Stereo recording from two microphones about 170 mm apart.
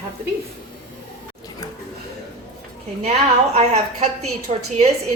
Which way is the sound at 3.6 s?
40° right (ahead or behind).